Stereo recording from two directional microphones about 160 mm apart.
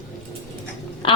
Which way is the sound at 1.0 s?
30° left (ahead or behind).